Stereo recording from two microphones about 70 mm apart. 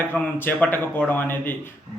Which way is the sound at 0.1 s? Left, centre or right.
Left.